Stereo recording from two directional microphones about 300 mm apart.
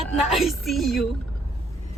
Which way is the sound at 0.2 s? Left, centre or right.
Centre.